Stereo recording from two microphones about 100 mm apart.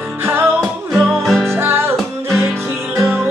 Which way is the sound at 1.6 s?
25° right (ahead or behind).